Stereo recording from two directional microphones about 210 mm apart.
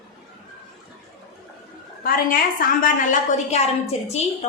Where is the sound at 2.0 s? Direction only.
45° left (ahead or behind).